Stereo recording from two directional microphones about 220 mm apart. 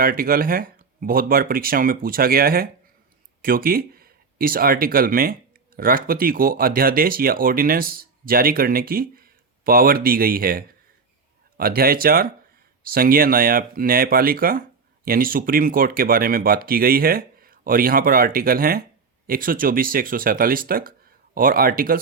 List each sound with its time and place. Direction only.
0.0 s speech: 40° right (ahead or behind)